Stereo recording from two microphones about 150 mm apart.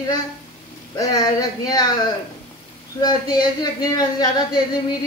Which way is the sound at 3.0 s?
25° left (ahead or behind).